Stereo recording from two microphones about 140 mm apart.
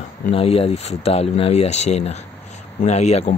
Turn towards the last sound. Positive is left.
turn(degrees=50)  # may be behind; listen again after turning